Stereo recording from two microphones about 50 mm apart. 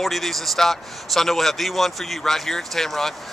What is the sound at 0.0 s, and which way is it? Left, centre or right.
A man's voice, centre.